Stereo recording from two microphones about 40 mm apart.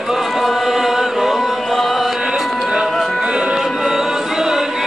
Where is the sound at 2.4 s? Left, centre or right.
Centre.